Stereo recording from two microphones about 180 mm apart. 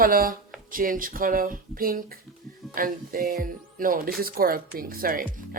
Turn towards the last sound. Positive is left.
turn(degrees=-50)  # may be behind; listen again after turning